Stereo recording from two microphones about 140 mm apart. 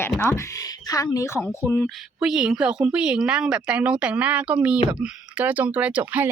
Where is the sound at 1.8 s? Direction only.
5° right (ahead or behind).